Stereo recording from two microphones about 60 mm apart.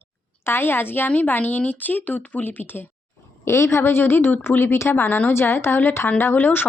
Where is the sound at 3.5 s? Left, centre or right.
Left.